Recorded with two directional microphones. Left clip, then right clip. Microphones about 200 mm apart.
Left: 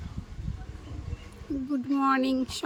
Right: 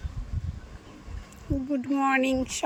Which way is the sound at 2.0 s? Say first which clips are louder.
Right 1 dB; centre (ahead or behind).